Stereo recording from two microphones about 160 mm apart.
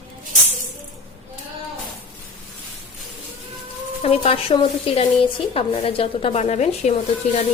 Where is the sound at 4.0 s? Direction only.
40° left (ahead or behind).